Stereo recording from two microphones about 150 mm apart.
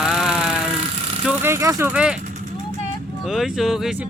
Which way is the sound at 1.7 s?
20° right (ahead or behind).